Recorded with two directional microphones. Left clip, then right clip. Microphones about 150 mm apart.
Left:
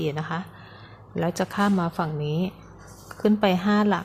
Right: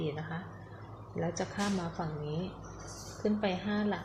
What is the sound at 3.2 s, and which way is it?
Speech, 45° left (ahead or behind).